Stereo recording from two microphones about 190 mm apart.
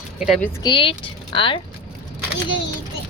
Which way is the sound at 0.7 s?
25° left (ahead or behind).